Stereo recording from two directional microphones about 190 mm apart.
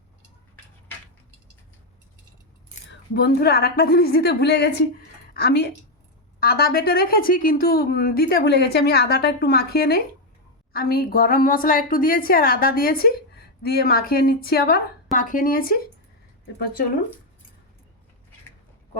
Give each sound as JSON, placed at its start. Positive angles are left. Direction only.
{"t": 3.2, "sound": "a woman's voice", "side_deg": 55}